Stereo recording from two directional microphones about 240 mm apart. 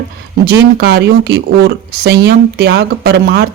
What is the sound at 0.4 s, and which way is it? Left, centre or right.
Speech, right.